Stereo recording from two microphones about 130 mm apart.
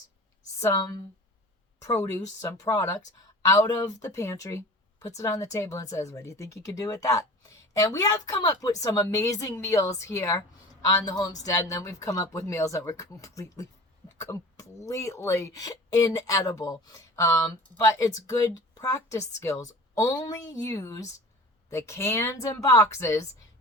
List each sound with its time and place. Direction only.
0.6 s speech: 25° left (ahead or behind)